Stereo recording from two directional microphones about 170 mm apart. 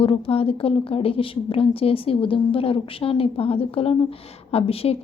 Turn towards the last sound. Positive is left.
turn(degrees=35)  # may be behind; listen again after turning